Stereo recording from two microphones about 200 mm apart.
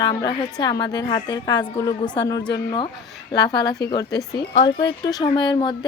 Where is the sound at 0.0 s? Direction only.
20° left (ahead or behind).